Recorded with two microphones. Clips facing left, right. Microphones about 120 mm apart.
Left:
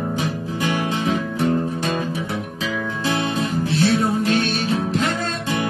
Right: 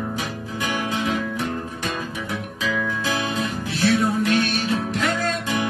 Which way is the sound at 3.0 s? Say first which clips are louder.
Left 3 dB; 30° left (ahead or behind).